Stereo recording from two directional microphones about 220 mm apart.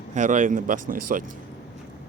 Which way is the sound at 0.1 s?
35° right (ahead or behind).